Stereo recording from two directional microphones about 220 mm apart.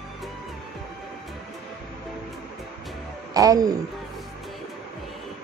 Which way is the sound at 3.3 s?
15° right (ahead or behind).